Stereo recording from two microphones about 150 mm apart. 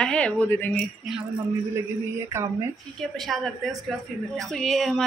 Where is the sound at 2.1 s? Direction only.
20° right (ahead or behind).